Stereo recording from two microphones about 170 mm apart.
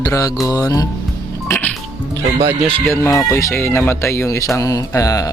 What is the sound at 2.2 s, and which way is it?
Speech, 20° right (ahead or behind).